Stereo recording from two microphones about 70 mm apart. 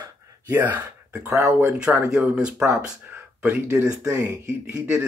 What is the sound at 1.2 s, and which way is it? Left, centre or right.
Speech, right.